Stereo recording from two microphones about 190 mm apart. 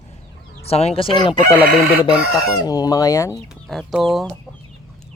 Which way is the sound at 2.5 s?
20° left (ahead or behind).